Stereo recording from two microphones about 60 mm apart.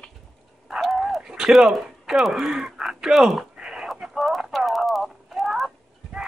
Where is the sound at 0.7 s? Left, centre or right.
Centre.